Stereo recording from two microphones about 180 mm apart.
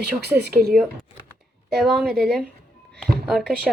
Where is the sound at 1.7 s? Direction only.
Centre (ahead or behind).